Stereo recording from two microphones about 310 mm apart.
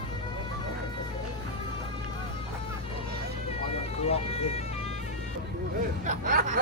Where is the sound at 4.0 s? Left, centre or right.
Centre.